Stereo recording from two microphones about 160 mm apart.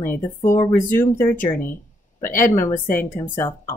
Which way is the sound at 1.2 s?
55° left (ahead or behind).